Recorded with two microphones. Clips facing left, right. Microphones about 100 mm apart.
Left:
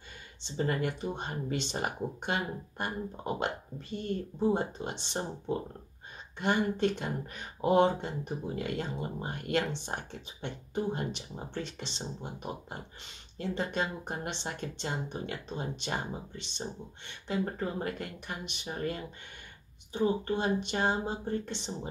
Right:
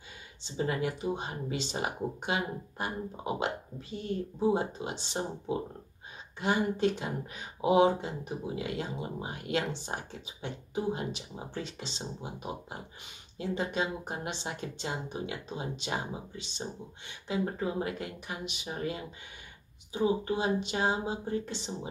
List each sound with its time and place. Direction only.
0.6 s speech: 5° right (ahead or behind)